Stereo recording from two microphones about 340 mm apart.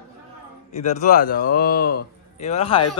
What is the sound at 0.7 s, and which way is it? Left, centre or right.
Speech, left.